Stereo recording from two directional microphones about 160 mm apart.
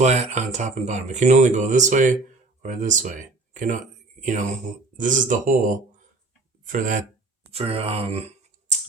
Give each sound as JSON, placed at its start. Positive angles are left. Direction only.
{"t": 0.0, "sound": "speech", "side_deg": -45}
{"t": 7.5, "sound": "speech", "side_deg": -35}